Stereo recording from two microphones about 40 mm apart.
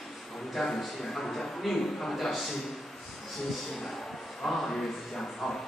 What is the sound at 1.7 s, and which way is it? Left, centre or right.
Speech, centre.